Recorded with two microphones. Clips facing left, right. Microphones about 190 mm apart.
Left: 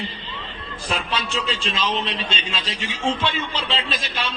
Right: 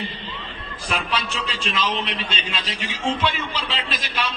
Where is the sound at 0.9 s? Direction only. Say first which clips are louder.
Even; 30° left (ahead or behind).